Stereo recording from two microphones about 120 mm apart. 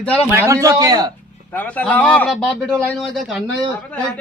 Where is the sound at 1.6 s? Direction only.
15° left (ahead or behind).